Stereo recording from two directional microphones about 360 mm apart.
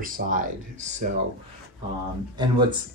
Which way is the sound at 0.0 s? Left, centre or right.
Right.